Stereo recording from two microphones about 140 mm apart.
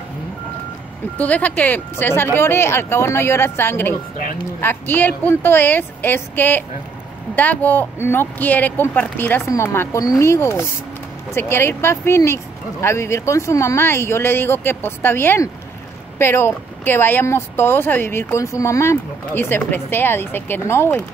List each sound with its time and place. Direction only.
1.1 s speech: 10° left (ahead or behind)